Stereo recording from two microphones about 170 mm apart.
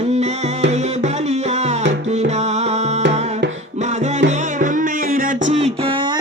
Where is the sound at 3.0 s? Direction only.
90° right.